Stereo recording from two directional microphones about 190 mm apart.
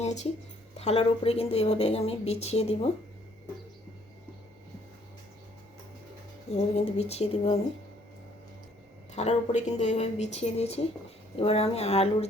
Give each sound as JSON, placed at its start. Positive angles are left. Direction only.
{"t": 0.0, "sound": "a sound", "side_deg": 35}
{"t": 0.8, "sound": "a woman's voice", "side_deg": 35}
{"t": 6.5, "sound": "a woman's voice", "side_deg": 30}
{"t": 9.1, "sound": "a woman's voice", "side_deg": 35}